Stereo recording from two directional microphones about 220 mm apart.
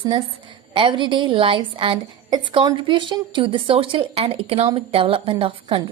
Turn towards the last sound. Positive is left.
turn(degrees=-20)  # may be behind; listen again after turning